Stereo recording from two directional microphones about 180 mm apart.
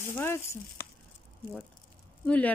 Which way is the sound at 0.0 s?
15° left (ahead or behind).